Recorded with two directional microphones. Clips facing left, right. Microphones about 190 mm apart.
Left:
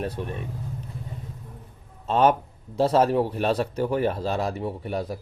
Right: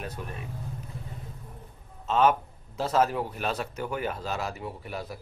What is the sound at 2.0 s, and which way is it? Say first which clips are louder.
A man's voice: left 3 dB; 35° left (ahead or behind).